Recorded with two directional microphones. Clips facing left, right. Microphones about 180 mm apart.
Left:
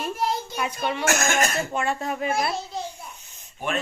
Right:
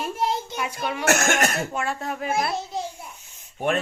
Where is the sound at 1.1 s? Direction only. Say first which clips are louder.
Right 3 dB; 65° right (ahead or behind).